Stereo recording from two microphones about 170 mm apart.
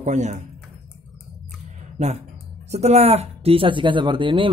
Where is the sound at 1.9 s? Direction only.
40° right (ahead or behind).